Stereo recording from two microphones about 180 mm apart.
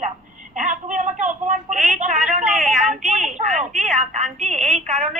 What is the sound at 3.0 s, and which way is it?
A woman's voice, 40° right (ahead or behind).